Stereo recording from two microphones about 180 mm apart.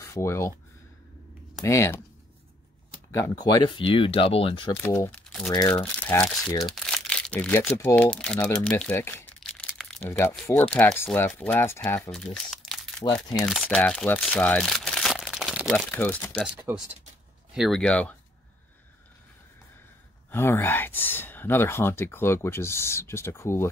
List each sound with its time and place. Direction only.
0.0 s speech: 15° left (ahead or behind)
1.6 s speech: 15° left (ahead or behind)
3.4 s speech: 25° left (ahead or behind)
4.8 s speech: 15° left (ahead or behind)
9.7 s crumpling: 5° left (ahead or behind)
10.6 s speech: 5° left (ahead or behind)
14.2 s crumpling: 10° left (ahead or behind)
16.7 s speech: 15° right (ahead or behind)
17.6 s speech: 5° left (ahead or behind)
20.2 s speech: 15° left (ahead or behind)